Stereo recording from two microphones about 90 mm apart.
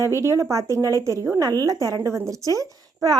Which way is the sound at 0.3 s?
35° right (ahead or behind).